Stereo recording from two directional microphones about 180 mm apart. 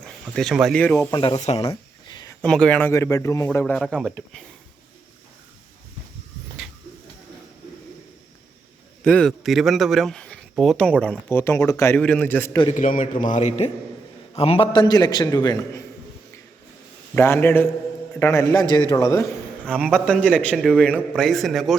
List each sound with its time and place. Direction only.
0.0 s speech: centre (ahead or behind)
0.9 s speech: 25° left (ahead or behind)
1.7 s a sound: 20° left (ahead or behind)
2.4 s speech: 5° left (ahead or behind)
9.0 s speech: 5° left (ahead or behind)
11.3 s speech: 15° left (ahead or behind)
12.7 s a man's voice: 45° left (ahead or behind); by 15.8 s 20° left (ahead or behind)
17.2 s speech: 10° left (ahead or behind)
19.7 s speech: 5° left (ahead or behind)